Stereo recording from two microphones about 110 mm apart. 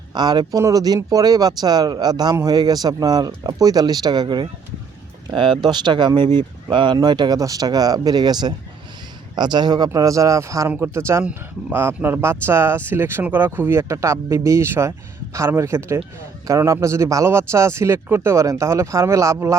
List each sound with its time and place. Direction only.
0.1 s speech: 40° right (ahead or behind)